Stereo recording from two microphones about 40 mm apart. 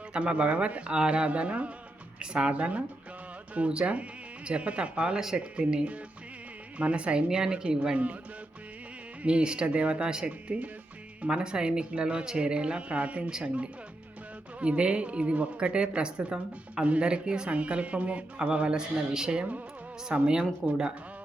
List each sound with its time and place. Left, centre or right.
0.1 s a woman's voice: right
7.3 s a woman's voice: centre
7.9 s speech: right
9.2 s a woman's voice: right
14.6 s a woman's voice: right